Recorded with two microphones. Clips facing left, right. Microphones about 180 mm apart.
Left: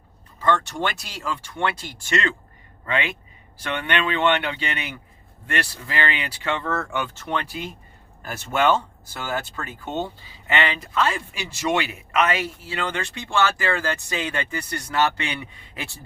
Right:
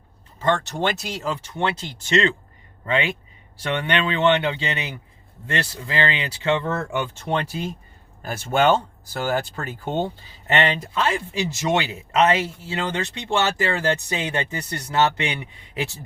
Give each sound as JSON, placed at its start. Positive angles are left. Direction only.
{"t": 0.4, "sound": "speech", "side_deg": -25}
{"t": 10.4, "sound": "speech", "side_deg": -30}